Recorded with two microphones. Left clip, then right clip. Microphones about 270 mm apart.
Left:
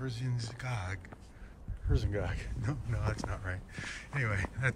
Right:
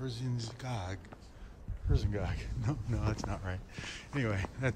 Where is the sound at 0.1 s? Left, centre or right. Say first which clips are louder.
Right 1 dB; centre.